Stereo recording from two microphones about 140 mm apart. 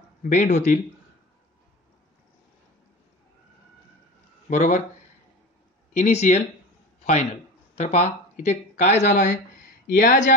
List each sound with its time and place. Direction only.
0.2 s speech: 60° left (ahead or behind)
4.5 s speech: 60° left (ahead or behind)
5.9 s speech: 60° left (ahead or behind)
7.7 s speech: 55° left (ahead or behind)
9.8 s speech: 90° left